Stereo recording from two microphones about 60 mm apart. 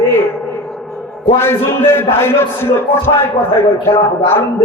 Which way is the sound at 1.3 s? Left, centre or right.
Left.